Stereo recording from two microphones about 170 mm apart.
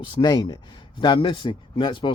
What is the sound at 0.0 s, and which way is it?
Speech, 30° left (ahead or behind).